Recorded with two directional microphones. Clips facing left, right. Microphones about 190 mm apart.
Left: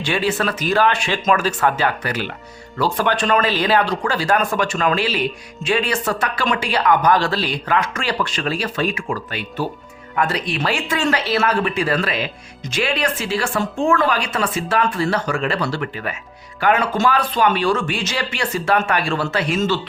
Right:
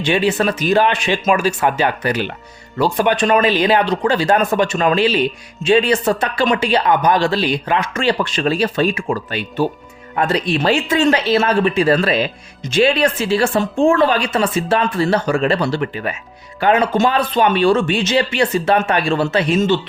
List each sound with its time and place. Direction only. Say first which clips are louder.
0.0 s speech: right 4 dB; 20° right (ahead or behind)